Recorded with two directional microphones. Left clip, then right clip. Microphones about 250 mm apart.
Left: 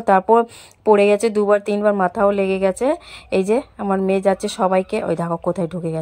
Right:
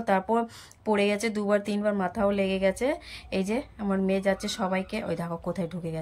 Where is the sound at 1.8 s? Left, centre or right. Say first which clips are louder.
Left 11 dB; left.